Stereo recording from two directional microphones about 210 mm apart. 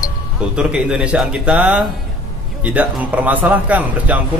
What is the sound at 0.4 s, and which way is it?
A man's voice, 5° right (ahead or behind).